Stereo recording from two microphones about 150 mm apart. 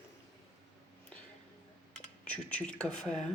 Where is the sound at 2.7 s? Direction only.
5° left (ahead or behind).